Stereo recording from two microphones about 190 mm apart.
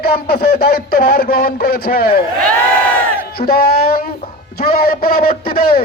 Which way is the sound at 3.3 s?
55° left (ahead or behind).